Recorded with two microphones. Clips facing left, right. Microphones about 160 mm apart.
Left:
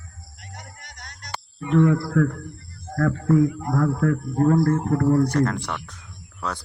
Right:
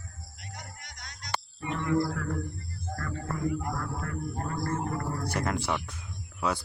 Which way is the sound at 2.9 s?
90° left.